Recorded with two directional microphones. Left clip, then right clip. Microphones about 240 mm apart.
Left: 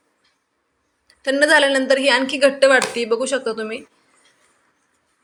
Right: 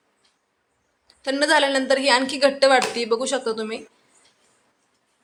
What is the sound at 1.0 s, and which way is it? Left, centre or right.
A woman's voice, centre.